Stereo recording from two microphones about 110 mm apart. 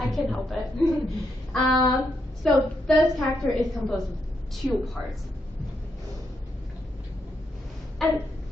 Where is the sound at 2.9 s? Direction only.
Centre (ahead or behind).